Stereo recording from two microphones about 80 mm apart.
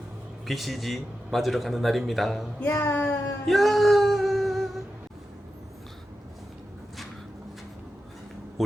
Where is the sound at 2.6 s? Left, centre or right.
Left.